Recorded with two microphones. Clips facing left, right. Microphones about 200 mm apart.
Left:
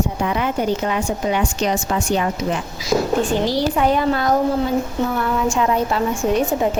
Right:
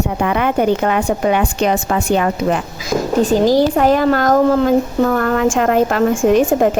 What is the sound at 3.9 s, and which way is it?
Speech, 90° right.